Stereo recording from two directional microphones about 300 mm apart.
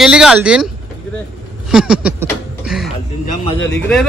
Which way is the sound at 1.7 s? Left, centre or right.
Centre.